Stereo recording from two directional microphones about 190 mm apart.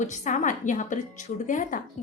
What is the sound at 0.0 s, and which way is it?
A woman's voice, 40° left (ahead or behind).